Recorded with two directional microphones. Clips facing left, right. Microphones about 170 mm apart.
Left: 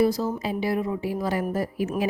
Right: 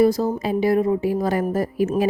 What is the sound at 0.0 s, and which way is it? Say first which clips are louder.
A woman's voice: right 5 dB; 50° right (ahead or behind).